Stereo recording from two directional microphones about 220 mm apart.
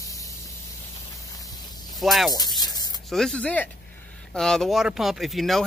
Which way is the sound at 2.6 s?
15° left (ahead or behind).